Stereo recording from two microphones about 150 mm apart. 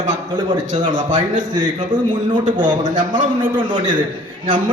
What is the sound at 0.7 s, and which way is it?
Speech, 60° right (ahead or behind).